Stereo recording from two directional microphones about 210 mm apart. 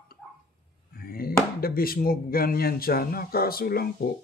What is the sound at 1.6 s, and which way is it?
Speech, 45° left (ahead or behind).